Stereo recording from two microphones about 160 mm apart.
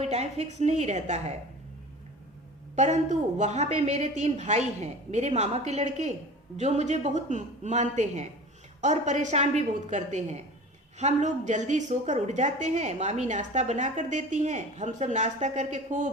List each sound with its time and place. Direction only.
0.0 s a woman's voice: 40° right (ahead or behind)
2.7 s a woman's voice: 45° right (ahead or behind)